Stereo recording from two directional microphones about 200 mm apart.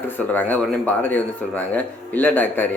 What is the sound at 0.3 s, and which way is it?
Speech, 10° left (ahead or behind).